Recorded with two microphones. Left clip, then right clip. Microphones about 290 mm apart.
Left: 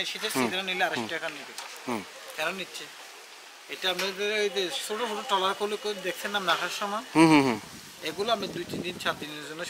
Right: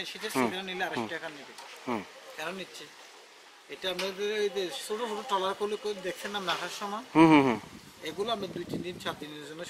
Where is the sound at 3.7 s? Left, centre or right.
Centre.